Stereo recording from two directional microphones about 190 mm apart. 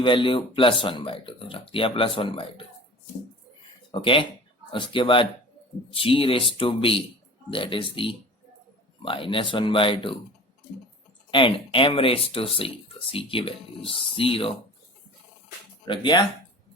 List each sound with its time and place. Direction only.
0.0 s speech: 25° left (ahead or behind)
4.0 s speech: 25° left (ahead or behind)
9.0 s speech: 30° left (ahead or behind)
11.3 s speech: 25° left (ahead or behind)
15.9 s speech: 25° left (ahead or behind)